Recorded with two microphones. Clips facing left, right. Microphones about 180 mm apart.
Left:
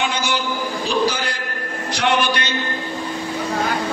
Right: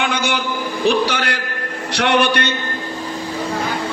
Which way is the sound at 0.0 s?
60° right (ahead or behind).